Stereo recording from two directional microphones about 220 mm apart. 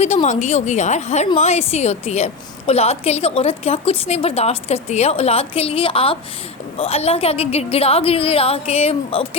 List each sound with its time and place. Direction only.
0.0 s a woman's voice: 30° left (ahead or behind)